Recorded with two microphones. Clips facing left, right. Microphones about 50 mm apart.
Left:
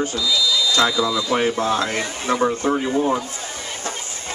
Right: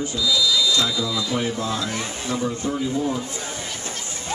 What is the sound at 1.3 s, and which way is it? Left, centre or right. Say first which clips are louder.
Speech: left 5 dB; left.